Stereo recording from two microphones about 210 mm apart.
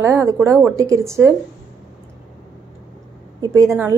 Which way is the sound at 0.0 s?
10° right (ahead or behind).